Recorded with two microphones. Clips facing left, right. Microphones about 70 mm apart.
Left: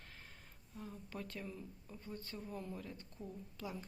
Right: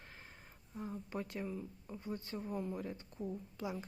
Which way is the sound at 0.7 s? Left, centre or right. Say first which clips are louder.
Right 6 dB; right.